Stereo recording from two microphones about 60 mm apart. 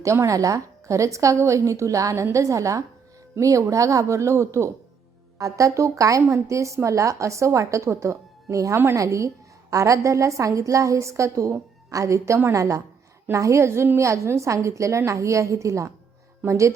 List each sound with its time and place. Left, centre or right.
0.0 s a woman's voice: right
5.4 s a woman's voice: right